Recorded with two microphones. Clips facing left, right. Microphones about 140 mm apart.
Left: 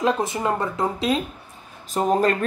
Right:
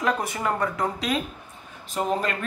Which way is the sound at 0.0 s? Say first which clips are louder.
Left 3 dB; 25° left (ahead or behind).